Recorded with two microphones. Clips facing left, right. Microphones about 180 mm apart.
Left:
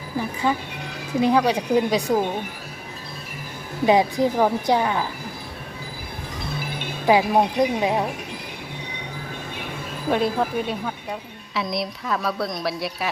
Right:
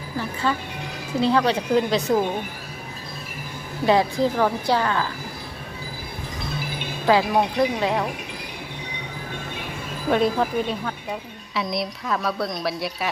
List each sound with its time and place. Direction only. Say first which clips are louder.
0.4 s a woman's voice: left 1 dB; 15° left (ahead or behind)
3.8 s a woman's voice: left 1 dB; 15° left (ahead or behind)
7.1 s a woman's voice: left 1 dB; 15° left (ahead or behind)
10.1 s a woman's voice: right 1 dB; centre (ahead or behind)